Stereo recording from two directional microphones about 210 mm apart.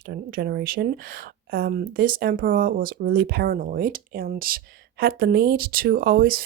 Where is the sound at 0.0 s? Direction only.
45° right (ahead or behind).